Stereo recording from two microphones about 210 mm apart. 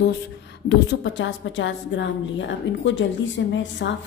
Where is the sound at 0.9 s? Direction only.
60° left (ahead or behind).